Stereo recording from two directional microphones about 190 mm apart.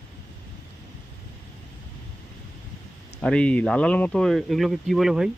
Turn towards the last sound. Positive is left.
turn(degrees=0)  # may be behind; listen again after turning